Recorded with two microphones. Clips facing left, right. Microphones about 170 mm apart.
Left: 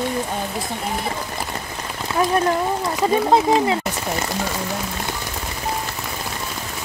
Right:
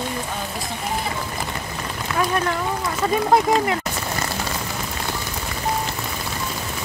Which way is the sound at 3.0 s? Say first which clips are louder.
Left 1 dB; 20° left (ahead or behind).